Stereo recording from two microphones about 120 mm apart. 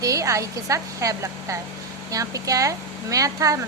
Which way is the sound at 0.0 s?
25° right (ahead or behind).